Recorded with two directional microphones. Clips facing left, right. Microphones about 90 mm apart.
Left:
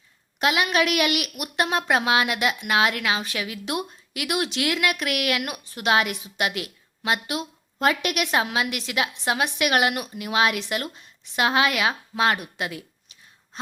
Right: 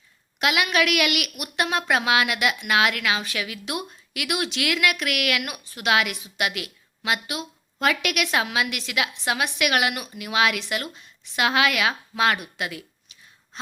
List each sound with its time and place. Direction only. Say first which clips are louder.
0.3 s a woman's voice: left 1 dB; 30° left (ahead or behind)